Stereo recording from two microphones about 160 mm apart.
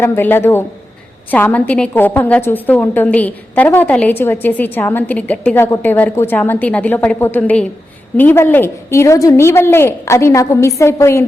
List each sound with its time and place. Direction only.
0.0 s a woman's voice: 15° left (ahead or behind)